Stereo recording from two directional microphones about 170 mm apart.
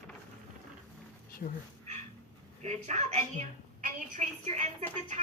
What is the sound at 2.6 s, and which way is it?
A woman's voice, 45° right (ahead or behind).